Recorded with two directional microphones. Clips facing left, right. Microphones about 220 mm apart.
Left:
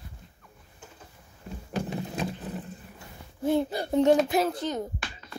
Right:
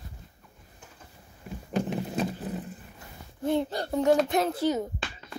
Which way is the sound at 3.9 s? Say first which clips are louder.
Left 2 dB; 25° left (ahead or behind).